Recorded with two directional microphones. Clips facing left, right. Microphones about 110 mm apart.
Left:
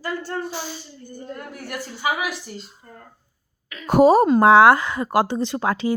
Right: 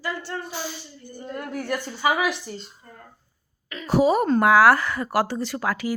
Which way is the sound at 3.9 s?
45° left (ahead or behind).